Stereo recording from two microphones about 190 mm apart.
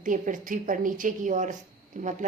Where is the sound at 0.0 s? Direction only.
45° right (ahead or behind).